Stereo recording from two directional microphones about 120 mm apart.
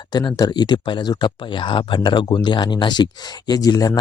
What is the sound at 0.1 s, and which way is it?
Speech, 35° left (ahead or behind).